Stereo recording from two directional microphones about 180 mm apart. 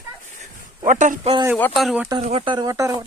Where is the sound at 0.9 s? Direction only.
45° right (ahead or behind).